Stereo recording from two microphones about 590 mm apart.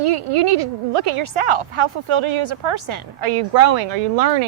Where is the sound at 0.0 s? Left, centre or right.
Right.